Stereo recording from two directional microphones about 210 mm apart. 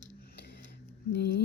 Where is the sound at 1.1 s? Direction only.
50° left (ahead or behind).